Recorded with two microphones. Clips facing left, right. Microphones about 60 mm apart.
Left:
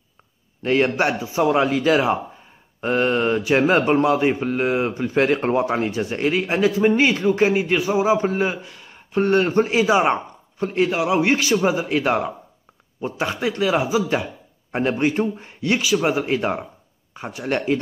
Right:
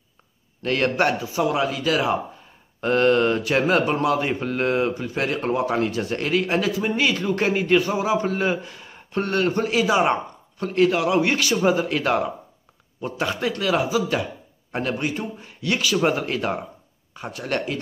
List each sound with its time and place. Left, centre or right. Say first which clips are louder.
0.6 s speech: left 2 dB; centre
1.4 s speech: left 5 dB; left
2.8 s speech: right 1 dB; centre
4.4 s speech: left 1 dB; centre
4.8 s speech: left 5 dB; left
6.7 s speech: left 5 dB; left
7.3 s speech: left 1 dB; centre
8.0 s speech: left 4 dB; left
8.4 s speech: left 1 dB; centre
9.2 s speech: left 5 dB; left
11.5 s speech: left 1 dB; centre; by 15.8 s left
15.8 s speech: right 1 dB; centre
16.3 s speech: left 3 dB; left